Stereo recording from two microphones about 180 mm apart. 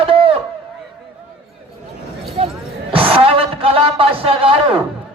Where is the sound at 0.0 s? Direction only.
30° right (ahead or behind).